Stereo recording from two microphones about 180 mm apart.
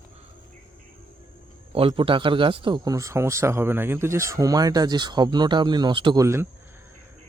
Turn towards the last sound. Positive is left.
turn(degrees=-15)  # may be behind; listen again after turning